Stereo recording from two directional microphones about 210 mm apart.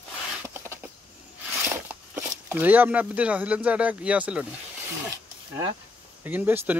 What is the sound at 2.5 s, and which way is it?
Speech, 10° right (ahead or behind).